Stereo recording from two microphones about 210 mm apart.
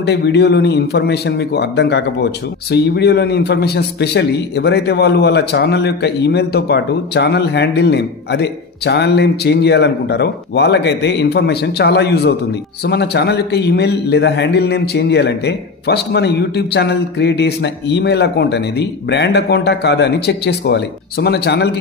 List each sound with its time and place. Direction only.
0.0 s a man's voice: 50° left (ahead or behind)